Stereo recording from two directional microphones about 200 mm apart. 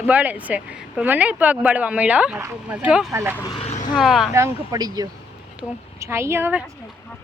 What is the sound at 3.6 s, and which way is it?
Vehicle, 35° left (ahead or behind).